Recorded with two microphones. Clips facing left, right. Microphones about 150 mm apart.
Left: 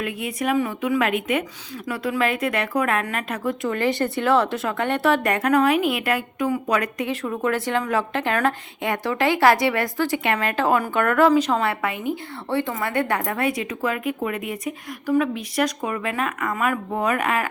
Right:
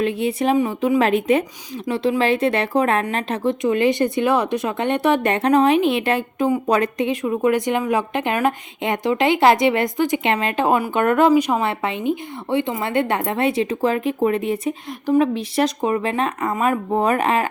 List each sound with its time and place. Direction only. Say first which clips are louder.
0.0 s a woman's voice: right 6 dB; 30° right (ahead or behind); by 11.7 s 10° right (ahead or behind)
11.7 s a woman's voice: right 3 dB; 25° right (ahead or behind)